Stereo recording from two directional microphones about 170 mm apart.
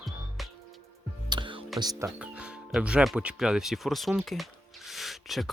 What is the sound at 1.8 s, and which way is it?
Speech, 20° right (ahead or behind).